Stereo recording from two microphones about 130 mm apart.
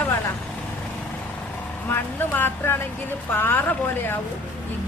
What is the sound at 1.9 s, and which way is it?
Speech, 15° left (ahead or behind).